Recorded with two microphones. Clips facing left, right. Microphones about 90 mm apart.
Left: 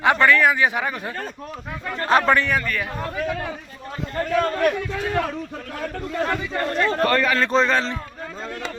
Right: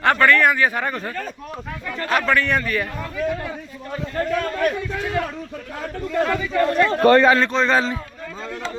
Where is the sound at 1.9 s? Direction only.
30° left (ahead or behind).